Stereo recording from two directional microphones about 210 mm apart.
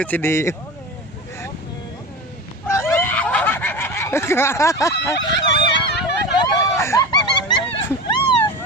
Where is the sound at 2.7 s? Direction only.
10° left (ahead or behind).